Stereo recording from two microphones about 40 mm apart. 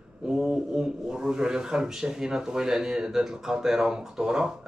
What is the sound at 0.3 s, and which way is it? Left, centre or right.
Speech, centre.